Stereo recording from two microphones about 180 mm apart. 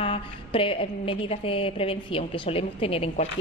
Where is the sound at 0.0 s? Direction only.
30° left (ahead or behind).